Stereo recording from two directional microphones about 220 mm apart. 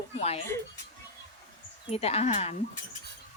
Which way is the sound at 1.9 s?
30° left (ahead or behind).